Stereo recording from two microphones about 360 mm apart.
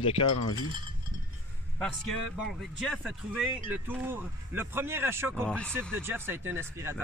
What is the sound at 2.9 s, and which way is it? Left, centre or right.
Speech, centre.